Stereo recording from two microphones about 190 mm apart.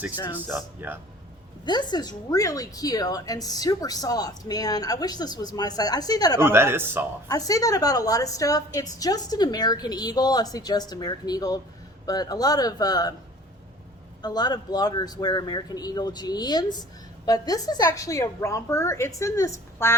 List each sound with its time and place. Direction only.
0.3 s speech: 10° right (ahead or behind)
1.6 s a woman's voice: 20° left (ahead or behind)
6.4 s speech: 10° right (ahead or behind)
7.3 s a woman's voice: 20° left (ahead or behind)
14.2 s a woman's voice: 20° left (ahead or behind)